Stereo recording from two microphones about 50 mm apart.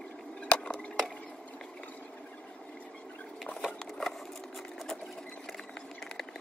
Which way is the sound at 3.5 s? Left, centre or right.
Centre.